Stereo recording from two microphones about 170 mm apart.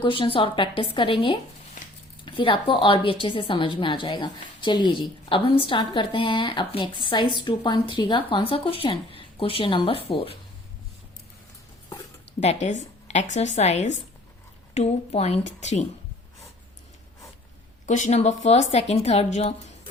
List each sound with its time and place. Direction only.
0.0 s a woman's voice: 30° left (ahead or behind)
12.4 s a woman's voice: 40° left (ahead or behind)
17.8 s a woman's voice: 45° left (ahead or behind)